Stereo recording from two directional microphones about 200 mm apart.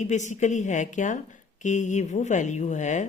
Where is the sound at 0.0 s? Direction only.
35° left (ahead or behind).